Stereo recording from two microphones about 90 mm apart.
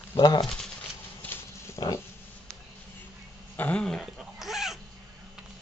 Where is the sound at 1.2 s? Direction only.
25° left (ahead or behind).